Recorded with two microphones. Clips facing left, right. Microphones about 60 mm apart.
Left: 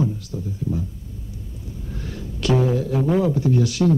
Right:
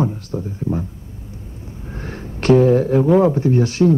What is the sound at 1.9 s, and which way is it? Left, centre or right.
Speech, right.